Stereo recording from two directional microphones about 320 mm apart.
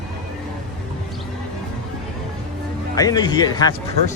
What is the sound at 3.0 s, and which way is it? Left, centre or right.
Speech, centre.